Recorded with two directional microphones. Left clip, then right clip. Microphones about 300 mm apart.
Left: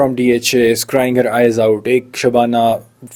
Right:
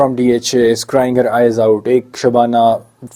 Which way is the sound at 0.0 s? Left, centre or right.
Left.